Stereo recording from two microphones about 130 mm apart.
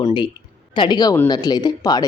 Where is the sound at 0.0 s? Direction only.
40° left (ahead or behind).